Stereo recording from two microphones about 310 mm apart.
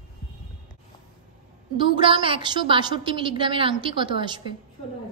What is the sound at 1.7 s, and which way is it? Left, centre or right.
A woman's voice, centre.